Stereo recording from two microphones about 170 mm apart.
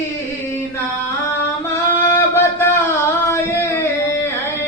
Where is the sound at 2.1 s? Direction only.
15° left (ahead or behind).